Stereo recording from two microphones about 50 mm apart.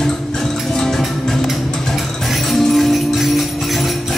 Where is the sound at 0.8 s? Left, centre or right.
Centre.